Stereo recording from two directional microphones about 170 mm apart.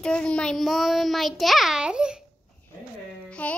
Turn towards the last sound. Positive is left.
turn(degrees=5)  # may be behind; listen again after turning